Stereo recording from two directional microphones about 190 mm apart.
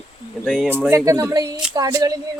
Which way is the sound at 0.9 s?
15° right (ahead or behind).